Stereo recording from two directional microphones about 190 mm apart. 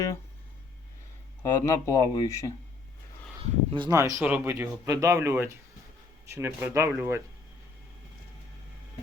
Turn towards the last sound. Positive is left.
turn(degrees=-15)  # may be behind; listen again after turning